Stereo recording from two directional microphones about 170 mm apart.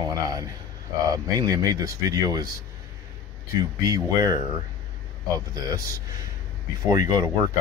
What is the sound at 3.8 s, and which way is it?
Speech, 20° right (ahead or behind).